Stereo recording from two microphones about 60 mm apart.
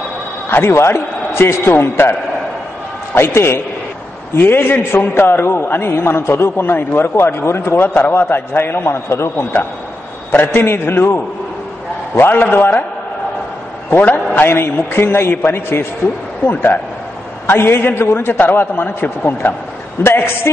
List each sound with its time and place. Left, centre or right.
0.5 s a man's voice: left
3.2 s a man's voice: left
7.9 s a man's voice: left
10.3 s a man's voice: left
13.8 s a man's voice: left
20.0 s a man's voice: left